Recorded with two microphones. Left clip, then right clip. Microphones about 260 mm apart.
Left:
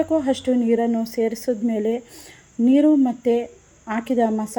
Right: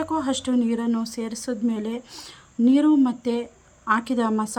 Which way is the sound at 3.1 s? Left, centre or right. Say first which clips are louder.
Left 6 dB; right.